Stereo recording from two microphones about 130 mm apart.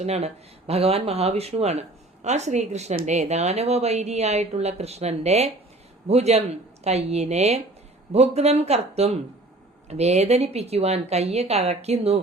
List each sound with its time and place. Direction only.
0.0 s speech: 55° right (ahead or behind)